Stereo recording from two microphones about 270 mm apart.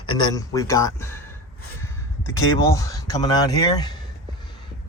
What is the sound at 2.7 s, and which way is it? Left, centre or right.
Speech, centre.